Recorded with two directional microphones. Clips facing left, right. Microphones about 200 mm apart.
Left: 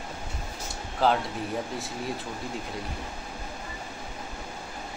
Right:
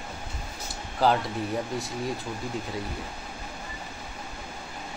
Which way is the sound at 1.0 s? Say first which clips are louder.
Right 1 dB; centre (ahead or behind).